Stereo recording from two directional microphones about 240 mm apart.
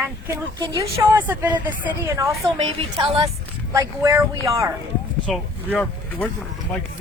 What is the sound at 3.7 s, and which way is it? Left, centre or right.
Speech, centre.